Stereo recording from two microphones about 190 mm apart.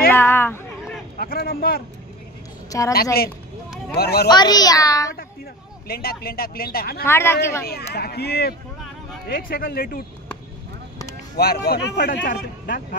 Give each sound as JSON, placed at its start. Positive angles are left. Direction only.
{"t": 0.1, "sound": "a sound", "side_deg": 10}
{"t": 1.1, "sound": "speech", "side_deg": 55}
{"t": 2.9, "sound": "speech", "side_deg": 55}
{"t": 4.3, "sound": "a child's voice", "side_deg": 20}
{"t": 5.9, "sound": "speech", "side_deg": 55}
{"t": 7.1, "sound": "speech", "side_deg": 15}
{"t": 7.6, "sound": "speech", "side_deg": 55}
{"t": 11.3, "sound": "speech", "side_deg": 55}